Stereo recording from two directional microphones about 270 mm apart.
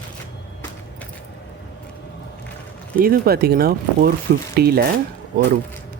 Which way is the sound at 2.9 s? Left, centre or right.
Right.